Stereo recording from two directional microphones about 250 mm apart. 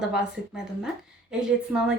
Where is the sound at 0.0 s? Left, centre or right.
Centre.